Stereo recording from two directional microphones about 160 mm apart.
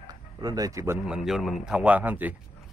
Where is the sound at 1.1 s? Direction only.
Centre (ahead or behind).